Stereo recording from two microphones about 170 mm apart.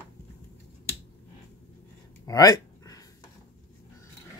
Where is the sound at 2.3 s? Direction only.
20° left (ahead or behind).